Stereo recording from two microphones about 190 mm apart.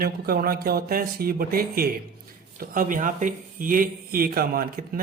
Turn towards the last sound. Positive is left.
turn(degrees=-50)  # may be behind; listen again after turning